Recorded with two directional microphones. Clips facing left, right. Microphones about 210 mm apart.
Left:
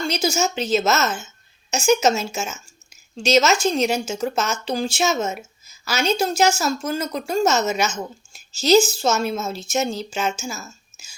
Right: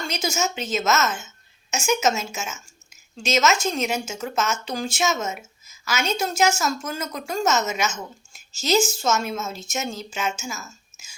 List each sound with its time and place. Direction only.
0.1 s a woman's voice: 35° left (ahead or behind)